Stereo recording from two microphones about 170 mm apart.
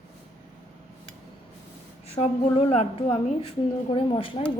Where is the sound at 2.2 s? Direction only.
35° left (ahead or behind).